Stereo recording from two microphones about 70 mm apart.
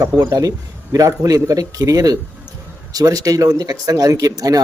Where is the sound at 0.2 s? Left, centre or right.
Right.